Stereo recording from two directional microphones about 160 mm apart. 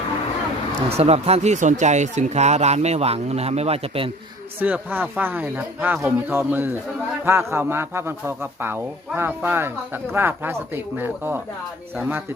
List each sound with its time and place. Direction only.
0.9 s speech: 40° right (ahead or behind)
4.6 s speech: 10° right (ahead or behind)